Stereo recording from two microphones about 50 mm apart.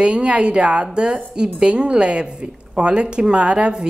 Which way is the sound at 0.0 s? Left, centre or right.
Right.